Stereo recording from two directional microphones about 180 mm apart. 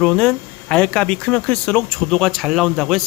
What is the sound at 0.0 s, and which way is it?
Speech, 5° left (ahead or behind).